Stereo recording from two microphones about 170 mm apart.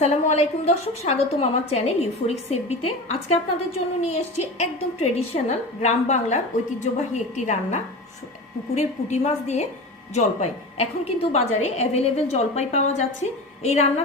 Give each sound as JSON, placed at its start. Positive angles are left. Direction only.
{"t": 0.0, "sound": "a woman's voice", "side_deg": 40}